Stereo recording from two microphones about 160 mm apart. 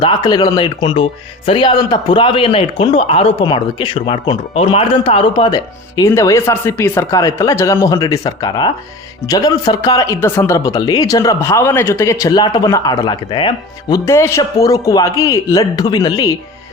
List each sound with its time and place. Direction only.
0.0 s a man's voice: 25° left (ahead or behind)